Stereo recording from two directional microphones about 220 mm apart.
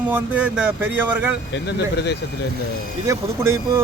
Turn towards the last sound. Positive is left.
turn(degrees=-15)  # may be behind; listen again after turning